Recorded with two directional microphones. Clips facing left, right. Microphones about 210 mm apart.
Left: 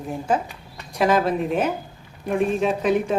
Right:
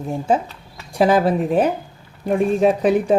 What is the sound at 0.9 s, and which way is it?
Speech, 30° right (ahead or behind).